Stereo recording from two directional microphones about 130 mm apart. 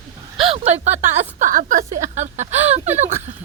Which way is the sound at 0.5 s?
55° right (ahead or behind).